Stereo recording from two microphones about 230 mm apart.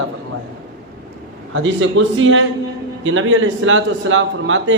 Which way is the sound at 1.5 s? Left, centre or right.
Right.